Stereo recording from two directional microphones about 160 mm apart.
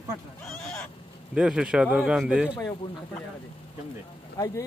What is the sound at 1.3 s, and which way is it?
A man's voice, 5° right (ahead or behind).